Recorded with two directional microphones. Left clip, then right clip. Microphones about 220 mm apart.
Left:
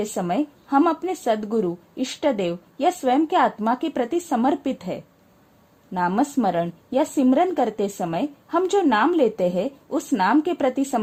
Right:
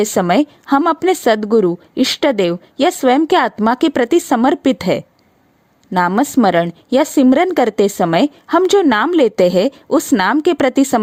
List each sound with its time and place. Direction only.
0.0 s a woman's voice: 50° right (ahead or behind)